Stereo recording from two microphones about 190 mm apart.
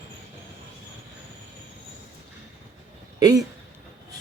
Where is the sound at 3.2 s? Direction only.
20° right (ahead or behind).